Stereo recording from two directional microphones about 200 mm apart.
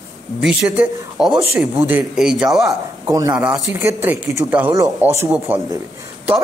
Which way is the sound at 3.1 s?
15° right (ahead or behind).